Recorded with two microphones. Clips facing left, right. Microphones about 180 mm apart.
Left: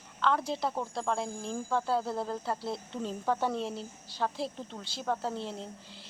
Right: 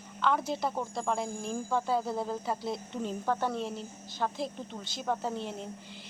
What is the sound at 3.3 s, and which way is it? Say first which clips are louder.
Speech: left 1 dB; 10° left (ahead or behind).